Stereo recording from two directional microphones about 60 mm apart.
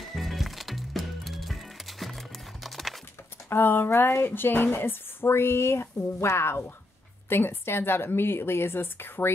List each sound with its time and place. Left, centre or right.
0.0 s music: centre
3.4 s speech: left